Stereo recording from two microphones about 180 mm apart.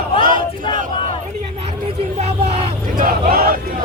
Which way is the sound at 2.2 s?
35° right (ahead or behind).